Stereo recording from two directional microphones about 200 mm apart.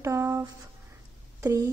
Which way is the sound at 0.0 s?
15° right (ahead or behind).